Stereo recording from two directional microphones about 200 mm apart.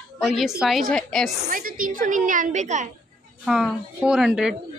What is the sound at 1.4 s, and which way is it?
Speech, 45° right (ahead or behind).